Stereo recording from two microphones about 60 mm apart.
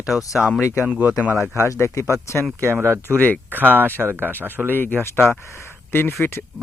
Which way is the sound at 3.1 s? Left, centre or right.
Left.